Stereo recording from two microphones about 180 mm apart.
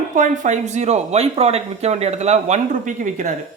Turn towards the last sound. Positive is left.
turn(degrees=-45)  # may be behind; listen again after turning